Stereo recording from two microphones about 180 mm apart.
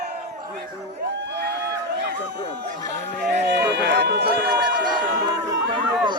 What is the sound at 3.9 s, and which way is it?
Run, 70° right (ahead or behind).